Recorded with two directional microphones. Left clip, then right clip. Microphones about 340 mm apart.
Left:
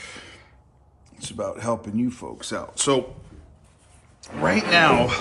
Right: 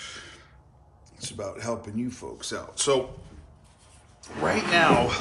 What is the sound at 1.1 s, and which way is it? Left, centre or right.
Speech, centre.